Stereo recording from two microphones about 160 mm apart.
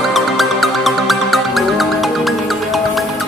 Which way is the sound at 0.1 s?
Centre (ahead or behind).